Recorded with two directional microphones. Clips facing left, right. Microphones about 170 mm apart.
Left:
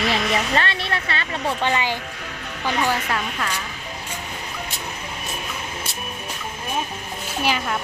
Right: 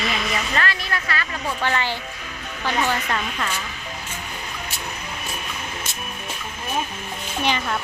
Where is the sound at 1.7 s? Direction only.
15° left (ahead or behind).